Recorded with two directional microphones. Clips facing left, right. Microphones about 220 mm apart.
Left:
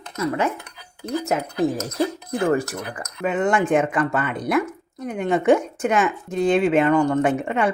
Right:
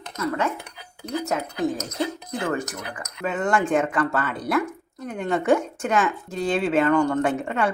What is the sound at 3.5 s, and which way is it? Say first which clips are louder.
Speech: left 1 dB; centre (ahead or behind).